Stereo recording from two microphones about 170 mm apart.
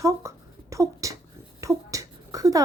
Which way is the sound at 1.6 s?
20° right (ahead or behind).